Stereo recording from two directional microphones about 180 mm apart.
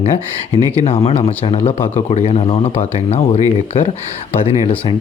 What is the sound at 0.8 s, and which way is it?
Speech, 35° left (ahead or behind).